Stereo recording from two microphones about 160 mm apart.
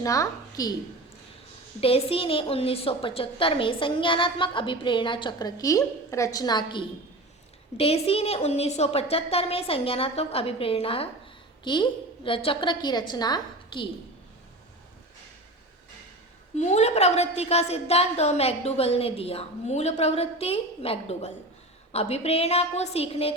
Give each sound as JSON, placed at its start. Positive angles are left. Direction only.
{"t": 0.0, "sound": "a woman's voice", "side_deg": 20}
{"t": 1.8, "sound": "a woman's voice", "side_deg": 35}
{"t": 16.6, "sound": "a woman's voice", "side_deg": 45}